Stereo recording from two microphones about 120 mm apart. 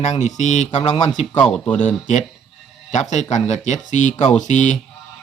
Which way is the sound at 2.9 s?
75° left (ahead or behind).